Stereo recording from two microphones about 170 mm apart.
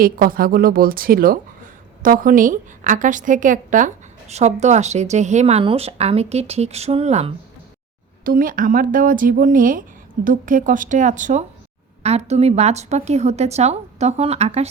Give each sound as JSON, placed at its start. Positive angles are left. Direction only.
{"t": 0.0, "sound": "a woman's voice", "side_deg": -55}
{"t": 8.2, "sound": "a woman's voice", "side_deg": -55}